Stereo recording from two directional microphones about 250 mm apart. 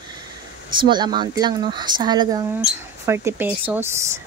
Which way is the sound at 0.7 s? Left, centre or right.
Centre.